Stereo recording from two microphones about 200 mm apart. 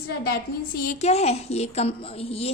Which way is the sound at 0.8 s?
35° left (ahead or behind).